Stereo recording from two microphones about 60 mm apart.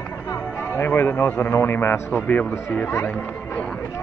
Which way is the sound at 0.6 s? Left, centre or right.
Left.